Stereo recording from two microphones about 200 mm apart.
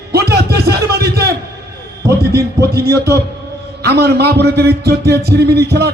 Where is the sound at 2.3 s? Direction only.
50° right (ahead or behind).